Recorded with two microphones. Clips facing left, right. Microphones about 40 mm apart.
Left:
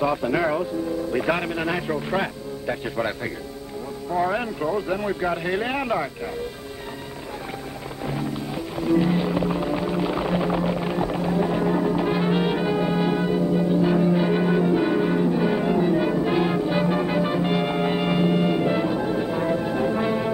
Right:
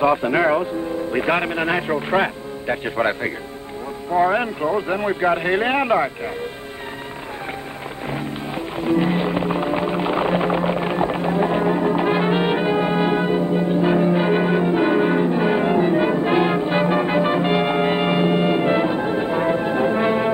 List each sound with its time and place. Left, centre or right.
0.0 s a man's voice: right
8.7 s music: right